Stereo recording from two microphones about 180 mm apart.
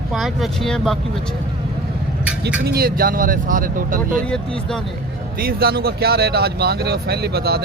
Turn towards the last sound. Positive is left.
turn(degrees=-60)  # may be behind; listen again after turning